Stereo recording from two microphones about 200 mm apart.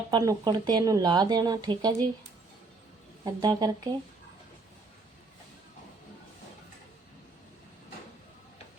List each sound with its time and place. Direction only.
0.1 s speech: 20° right (ahead or behind)
3.4 s speech: 20° right (ahead or behind)